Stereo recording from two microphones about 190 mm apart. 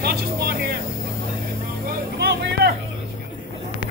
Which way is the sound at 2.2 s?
55° right (ahead or behind).